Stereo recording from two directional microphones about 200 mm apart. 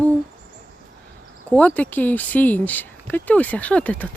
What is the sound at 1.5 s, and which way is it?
Speech, 5° left (ahead or behind).